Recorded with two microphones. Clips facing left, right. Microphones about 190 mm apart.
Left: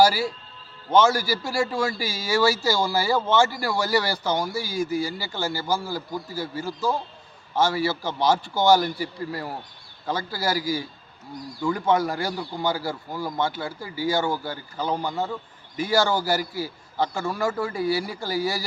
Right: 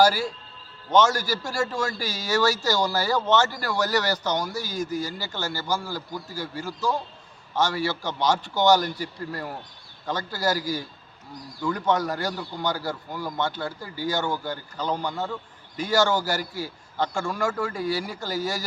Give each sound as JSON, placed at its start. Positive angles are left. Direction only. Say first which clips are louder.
{"t": 0.0, "sound": "a man's voice", "louder": "left 1 dB", "side_deg": 10}